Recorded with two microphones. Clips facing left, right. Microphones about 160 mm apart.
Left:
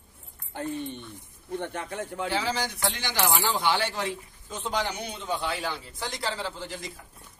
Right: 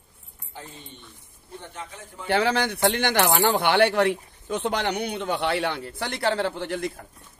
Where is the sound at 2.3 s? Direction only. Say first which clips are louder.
Right 9 dB; 65° right (ahead or behind).